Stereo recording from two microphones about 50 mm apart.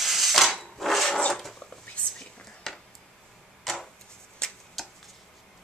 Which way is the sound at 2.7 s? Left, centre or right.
Centre.